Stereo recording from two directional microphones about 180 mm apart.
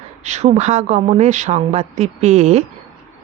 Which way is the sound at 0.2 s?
40° right (ahead or behind).